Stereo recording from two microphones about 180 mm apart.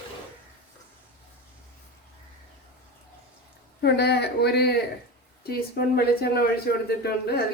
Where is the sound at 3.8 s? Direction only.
65° left (ahead or behind).